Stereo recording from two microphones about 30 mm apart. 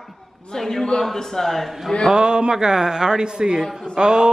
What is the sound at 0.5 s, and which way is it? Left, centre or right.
A man's voice, left.